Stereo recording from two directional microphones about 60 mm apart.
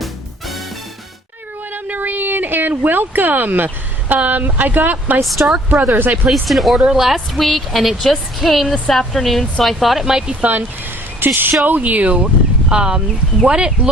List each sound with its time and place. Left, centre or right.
0.0 s music: centre
1.7 s a sound: right
4.1 s speech: right
5.2 s a woman's voice: centre
10.4 s speech: right